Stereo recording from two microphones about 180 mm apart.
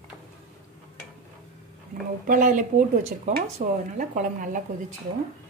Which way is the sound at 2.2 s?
45° right (ahead or behind).